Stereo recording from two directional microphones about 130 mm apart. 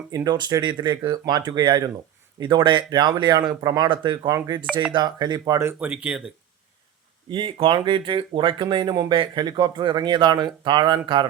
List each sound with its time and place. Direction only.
0.1 s speech: 30° right (ahead or behind); by 6.3 s 10° right (ahead or behind)
7.3 s speech: 40° right (ahead or behind)